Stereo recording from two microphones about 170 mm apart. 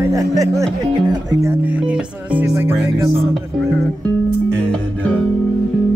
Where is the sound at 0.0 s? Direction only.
20° right (ahead or behind).